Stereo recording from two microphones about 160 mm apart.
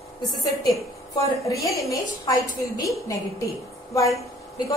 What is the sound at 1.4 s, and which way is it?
Speech, 20° left (ahead or behind).